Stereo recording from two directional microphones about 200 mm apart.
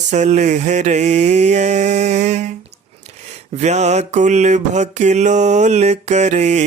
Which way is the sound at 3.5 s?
35° right (ahead or behind).